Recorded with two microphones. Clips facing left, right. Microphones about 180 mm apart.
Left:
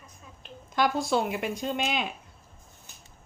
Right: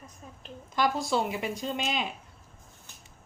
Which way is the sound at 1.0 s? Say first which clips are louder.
Left 2 dB; centre (ahead or behind).